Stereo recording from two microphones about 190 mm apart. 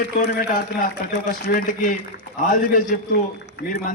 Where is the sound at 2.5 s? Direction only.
45° left (ahead or behind).